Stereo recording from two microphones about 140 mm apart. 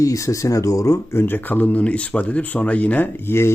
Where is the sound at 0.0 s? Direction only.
25° left (ahead or behind).